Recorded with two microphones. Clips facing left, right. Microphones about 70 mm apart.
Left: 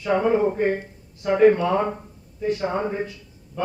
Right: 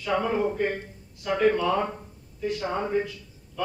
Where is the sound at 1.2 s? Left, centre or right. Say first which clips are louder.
Left 6 dB; left.